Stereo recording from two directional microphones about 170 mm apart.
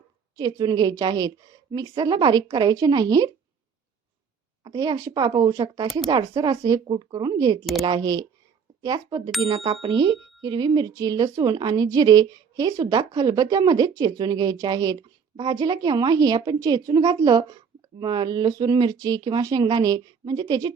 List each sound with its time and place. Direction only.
0.3 s speech: 25° right (ahead or behind)
4.6 s speech: 25° right (ahead or behind)
9.5 s speech: 35° right (ahead or behind)